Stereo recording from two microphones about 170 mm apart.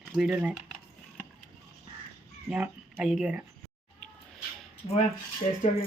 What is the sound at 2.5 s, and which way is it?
Speech, 5° right (ahead or behind).